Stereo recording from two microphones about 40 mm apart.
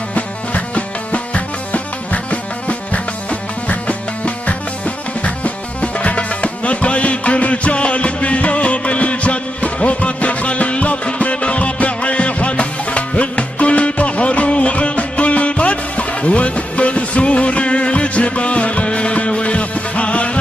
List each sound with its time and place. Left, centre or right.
0.1 s music: left
2.9 s music: left